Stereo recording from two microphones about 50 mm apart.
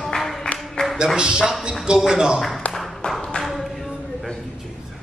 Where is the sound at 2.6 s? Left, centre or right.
Left.